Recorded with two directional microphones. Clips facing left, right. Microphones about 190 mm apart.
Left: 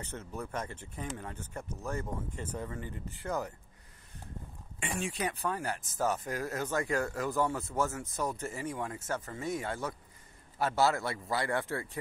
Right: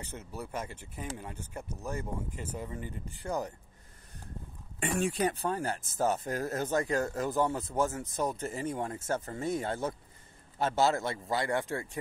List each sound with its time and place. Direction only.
0.0 s speech: 10° right (ahead or behind)
4.7 s speech: 40° right (ahead or behind)
5.3 s speech: 30° right (ahead or behind)